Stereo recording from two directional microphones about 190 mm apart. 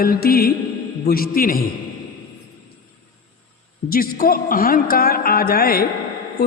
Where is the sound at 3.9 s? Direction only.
50° left (ahead or behind).